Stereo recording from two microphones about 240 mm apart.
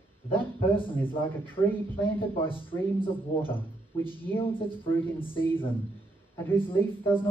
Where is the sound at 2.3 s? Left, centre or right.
Left.